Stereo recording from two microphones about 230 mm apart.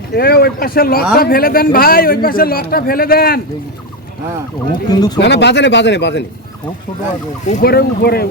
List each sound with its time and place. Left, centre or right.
0.1 s a man's voice: left
4.9 s speech: centre
5.2 s speech: left
7.6 s speech: left